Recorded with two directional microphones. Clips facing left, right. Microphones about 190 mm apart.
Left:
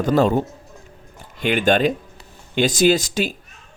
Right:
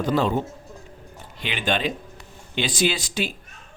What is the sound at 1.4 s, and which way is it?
Speech, 45° left (ahead or behind).